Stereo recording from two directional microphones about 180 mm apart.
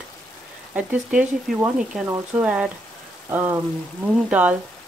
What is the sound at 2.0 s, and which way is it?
Speech, 15° right (ahead or behind).